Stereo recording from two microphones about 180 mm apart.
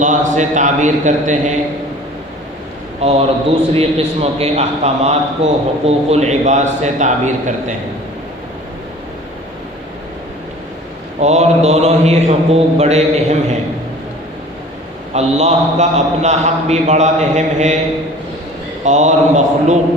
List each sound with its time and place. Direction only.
0.0 s a man's voice: 45° right (ahead or behind)
3.0 s a man's voice: 35° right (ahead or behind)
11.2 s a man's voice: 40° right (ahead or behind)
15.1 s a man's voice: 35° right (ahead or behind)
18.9 s a man's voice: 40° right (ahead or behind)